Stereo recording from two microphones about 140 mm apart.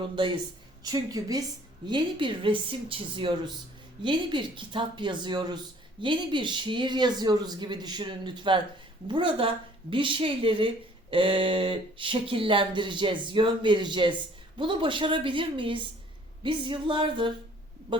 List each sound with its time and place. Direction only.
0.9 s a woman's voice: 25° right (ahead or behind)